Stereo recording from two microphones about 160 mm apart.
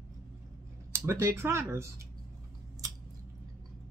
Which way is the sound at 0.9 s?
15° right (ahead or behind).